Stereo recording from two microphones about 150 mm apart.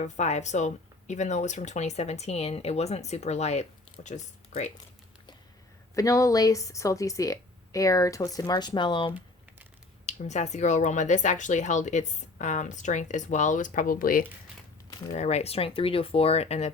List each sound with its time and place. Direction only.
0.0 s speech: 50° left (ahead or behind)
5.9 s speech: 20° left (ahead or behind)
10.1 s speech: 50° left (ahead or behind); by 14.3 s 70° left (ahead or behind)
15.1 s speech: 50° left (ahead or behind)